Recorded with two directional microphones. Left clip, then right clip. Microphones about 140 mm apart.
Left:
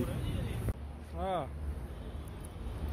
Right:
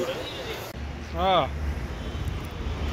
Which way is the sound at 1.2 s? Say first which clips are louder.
Right 13 dB; 40° left (ahead or behind).